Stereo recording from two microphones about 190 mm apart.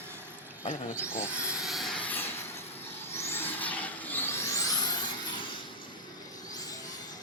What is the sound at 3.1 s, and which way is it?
Vehicle, 10° left (ahead or behind).